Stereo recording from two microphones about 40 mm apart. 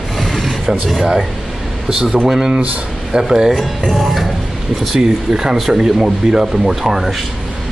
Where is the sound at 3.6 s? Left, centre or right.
Centre.